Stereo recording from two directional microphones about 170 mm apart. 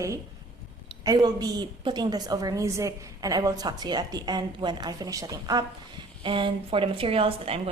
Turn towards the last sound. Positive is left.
turn(degrees=-35)  # may be behind; listen again after turning